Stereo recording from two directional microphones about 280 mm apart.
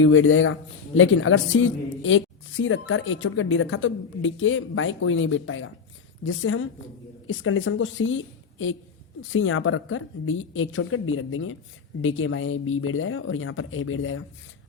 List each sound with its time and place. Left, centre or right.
0.0 s a woman's voice: left